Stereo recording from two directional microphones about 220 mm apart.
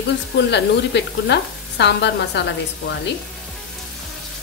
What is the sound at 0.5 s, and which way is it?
Frying, 50° left (ahead or behind).